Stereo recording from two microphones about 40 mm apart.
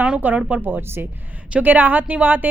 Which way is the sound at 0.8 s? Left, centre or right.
Right.